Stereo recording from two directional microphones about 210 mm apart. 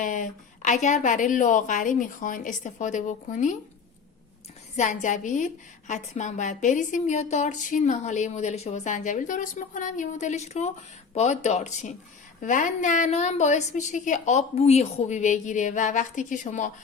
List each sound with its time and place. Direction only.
0.0 s a woman's voice: 40° left (ahead or behind)
4.8 s a woman's voice: 35° left (ahead or behind)